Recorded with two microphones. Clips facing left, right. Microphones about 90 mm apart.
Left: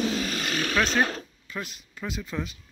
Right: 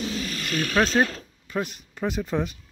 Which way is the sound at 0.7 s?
35° right (ahead or behind).